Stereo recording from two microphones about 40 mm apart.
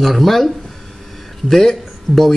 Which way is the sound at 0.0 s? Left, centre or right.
Centre.